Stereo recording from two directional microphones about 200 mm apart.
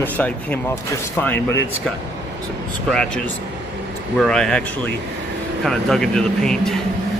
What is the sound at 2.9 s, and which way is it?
Speech, 5° left (ahead or behind).